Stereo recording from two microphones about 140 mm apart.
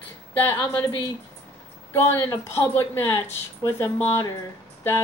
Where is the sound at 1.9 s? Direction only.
15° left (ahead or behind).